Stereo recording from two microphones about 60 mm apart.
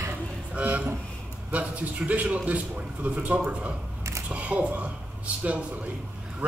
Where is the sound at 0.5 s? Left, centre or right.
Right.